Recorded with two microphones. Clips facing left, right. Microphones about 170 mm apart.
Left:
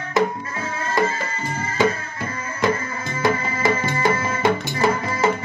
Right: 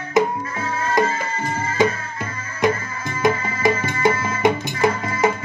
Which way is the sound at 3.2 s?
20° right (ahead or behind).